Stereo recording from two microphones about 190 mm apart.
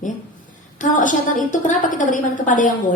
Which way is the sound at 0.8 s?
45° left (ahead or behind).